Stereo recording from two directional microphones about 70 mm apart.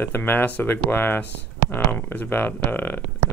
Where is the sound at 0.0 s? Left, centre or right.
Left.